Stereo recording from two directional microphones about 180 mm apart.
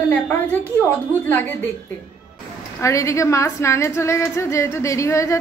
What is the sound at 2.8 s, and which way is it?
A woman's voice, 15° left (ahead or behind).